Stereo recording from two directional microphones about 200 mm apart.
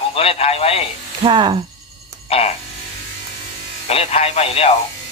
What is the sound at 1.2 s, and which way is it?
Speech, 25° right (ahead or behind).